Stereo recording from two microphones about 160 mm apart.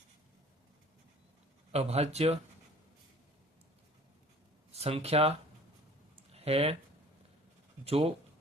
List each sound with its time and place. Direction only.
1.7 s speech: 40° right (ahead or behind)
4.7 s speech: 40° right (ahead or behind)
6.3 s speech: 40° right (ahead or behind)
7.9 s speech: 40° right (ahead or behind)